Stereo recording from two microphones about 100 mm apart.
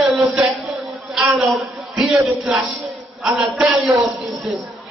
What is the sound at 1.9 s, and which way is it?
A man's voice, centre (ahead or behind).